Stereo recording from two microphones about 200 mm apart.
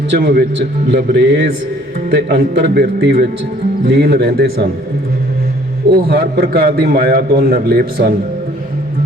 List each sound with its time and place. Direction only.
0.1 s a man's voice: 55° right (ahead or behind)
5.9 s a man's voice: 50° right (ahead or behind)